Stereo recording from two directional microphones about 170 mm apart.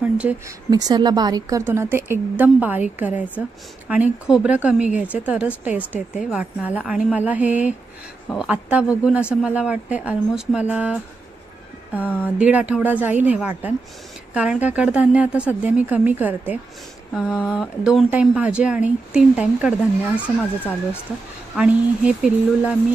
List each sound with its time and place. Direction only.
0.0 s a woman's voice: 10° right (ahead or behind)
0.7 s a woman's voice: 20° right (ahead or behind); by 19.7 s 5° right (ahead or behind)
20.2 s speech: 10° left (ahead or behind)
21.5 s a woman's voice: 5° right (ahead or behind)